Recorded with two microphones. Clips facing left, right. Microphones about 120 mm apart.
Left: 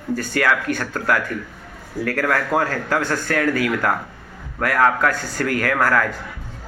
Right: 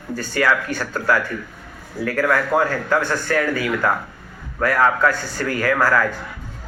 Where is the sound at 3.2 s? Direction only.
65° left (ahead or behind).